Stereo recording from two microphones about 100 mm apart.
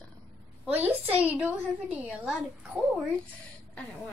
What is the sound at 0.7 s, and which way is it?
Speech, 15° right (ahead or behind).